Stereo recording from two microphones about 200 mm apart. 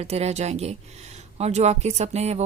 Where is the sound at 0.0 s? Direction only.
30° right (ahead or behind).